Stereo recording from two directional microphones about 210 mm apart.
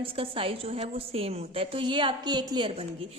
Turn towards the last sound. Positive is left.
turn(degrees=-25)  # may be behind; listen again after turning